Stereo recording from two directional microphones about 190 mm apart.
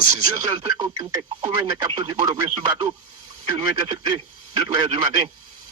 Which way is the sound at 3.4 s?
25° right (ahead or behind).